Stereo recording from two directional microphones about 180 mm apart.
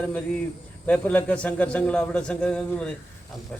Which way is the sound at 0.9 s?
10° left (ahead or behind).